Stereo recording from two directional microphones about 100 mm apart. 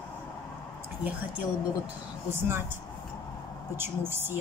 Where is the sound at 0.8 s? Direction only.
15° right (ahead or behind).